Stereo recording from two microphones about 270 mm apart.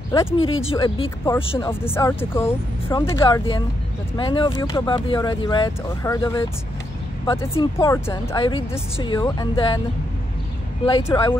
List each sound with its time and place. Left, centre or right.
0.1 s speech: centre
1.7 s speech: centre
11.1 s speech: centre